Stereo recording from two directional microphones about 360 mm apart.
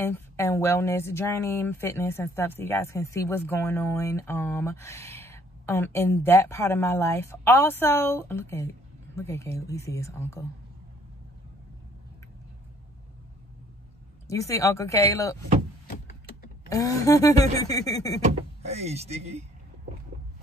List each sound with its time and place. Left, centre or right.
0.0 s a woman's voice: centre
14.2 s a woman's voice: centre
16.6 s a woman's voice: centre
18.2 s speech: centre